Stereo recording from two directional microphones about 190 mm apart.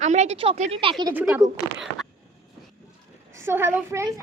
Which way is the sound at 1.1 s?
10° right (ahead or behind).